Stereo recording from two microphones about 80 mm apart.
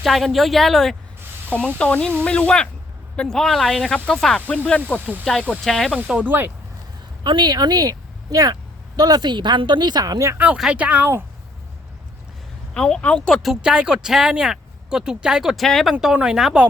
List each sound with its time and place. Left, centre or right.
0.0 s speech: centre
1.5 s speech: centre
4.9 s speech: right
5.2 s speech: centre
6.2 s speech: right
7.3 s speech: right
10.3 s speech: centre
12.7 s speech: centre
13.4 s speech: centre